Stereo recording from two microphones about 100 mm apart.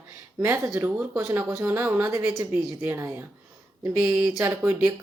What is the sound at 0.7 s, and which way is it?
Speech, 15° right (ahead or behind).